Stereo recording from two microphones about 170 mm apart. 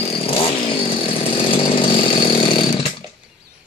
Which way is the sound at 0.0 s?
35° left (ahead or behind).